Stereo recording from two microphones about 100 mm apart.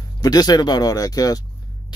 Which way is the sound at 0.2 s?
40° left (ahead or behind).